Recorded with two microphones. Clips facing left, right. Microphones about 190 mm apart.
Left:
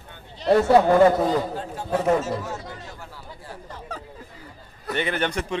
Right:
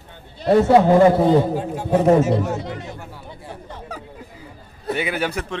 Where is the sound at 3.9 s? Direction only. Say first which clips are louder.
Right 1 dB; 10° right (ahead or behind).